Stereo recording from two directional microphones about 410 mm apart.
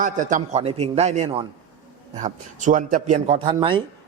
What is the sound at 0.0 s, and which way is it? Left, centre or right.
A man's voice, centre.